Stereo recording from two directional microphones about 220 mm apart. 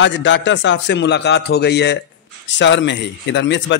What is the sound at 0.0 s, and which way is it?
A man's voice, 55° left (ahead or behind).